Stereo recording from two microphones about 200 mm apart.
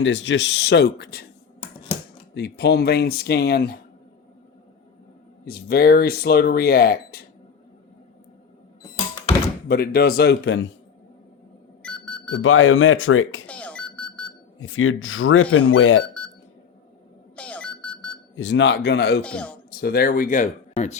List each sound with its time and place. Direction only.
0.0 s speech: 65° left (ahead or behind)
2.3 s speech: 55° left (ahead or behind)
5.5 s speech: 50° left (ahead or behind)
9.6 s speech: 50° left (ahead or behind)
11.8 s a sound: 5° left (ahead or behind)
12.4 s speech: 90° left
13.5 s a sound: 5° left (ahead or behind)
14.6 s speech: 90° left
16.0 s a sound: 5° left (ahead or behind)
17.3 s a sound: 5° left (ahead or behind)
18.3 s speech: 65° left (ahead or behind)
19.2 s speech: 5° left (ahead or behind)
19.8 s speech: 50° left (ahead or behind)